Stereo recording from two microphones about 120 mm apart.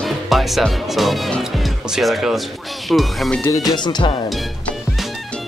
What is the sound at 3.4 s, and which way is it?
Speech, 25° left (ahead or behind).